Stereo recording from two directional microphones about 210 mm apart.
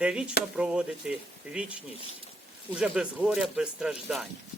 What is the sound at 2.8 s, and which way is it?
A man's voice, 5° right (ahead or behind).